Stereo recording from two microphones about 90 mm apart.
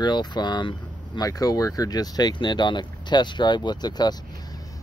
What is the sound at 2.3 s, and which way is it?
Speech, 55° left (ahead or behind).